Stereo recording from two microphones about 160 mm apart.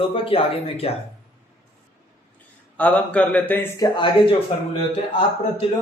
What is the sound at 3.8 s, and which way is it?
Speech, 25° left (ahead or behind).